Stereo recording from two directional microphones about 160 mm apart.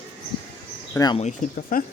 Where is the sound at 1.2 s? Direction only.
50° left (ahead or behind).